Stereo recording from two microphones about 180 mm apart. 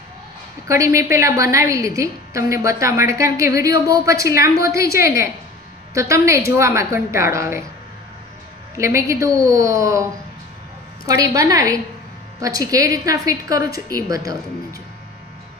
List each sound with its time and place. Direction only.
0.7 s a woman's voice: 15° right (ahead or behind)
8.8 s a woman's voice: 15° right (ahead or behind)